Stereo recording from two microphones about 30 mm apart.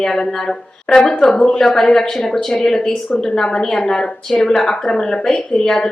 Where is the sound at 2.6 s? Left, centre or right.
Left.